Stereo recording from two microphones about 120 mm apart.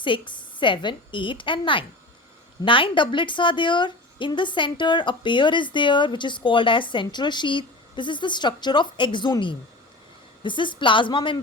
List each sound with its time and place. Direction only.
0.0 s a woman's voice: 40° left (ahead or behind)